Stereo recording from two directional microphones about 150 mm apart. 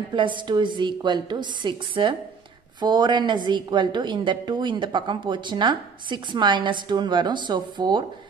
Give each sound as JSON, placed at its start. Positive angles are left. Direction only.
{"t": 0.1, "sound": "a woman's voice", "side_deg": -30}